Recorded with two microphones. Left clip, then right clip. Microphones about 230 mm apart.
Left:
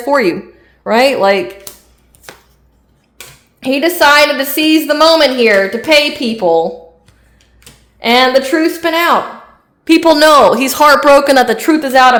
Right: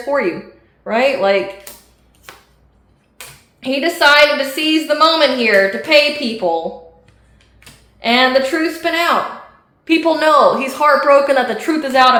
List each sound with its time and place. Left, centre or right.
0.9 s a woman's voice: left
3.6 s a woman's voice: left
7.9 s a woman's voice: left